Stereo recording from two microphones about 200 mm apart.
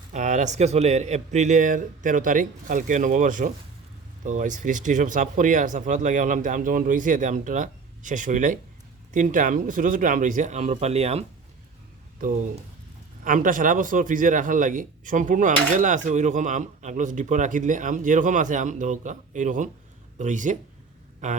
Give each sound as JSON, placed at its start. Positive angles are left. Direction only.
{"t": 0.1, "sound": "a man's voice", "side_deg": -40}
{"t": 13.2, "sound": "a man's voice", "side_deg": -40}